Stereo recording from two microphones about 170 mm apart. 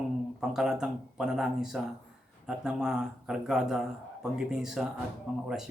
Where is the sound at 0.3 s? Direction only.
5° right (ahead or behind).